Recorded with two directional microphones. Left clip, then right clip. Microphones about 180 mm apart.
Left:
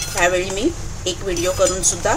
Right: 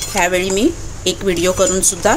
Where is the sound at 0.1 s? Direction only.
30° right (ahead or behind).